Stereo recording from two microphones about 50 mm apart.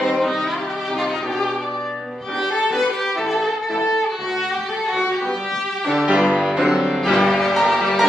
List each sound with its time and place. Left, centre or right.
0.0 s violin: centre
2.5 s music: centre
3.3 s violin: centre
6.0 s music: right
6.4 s music: centre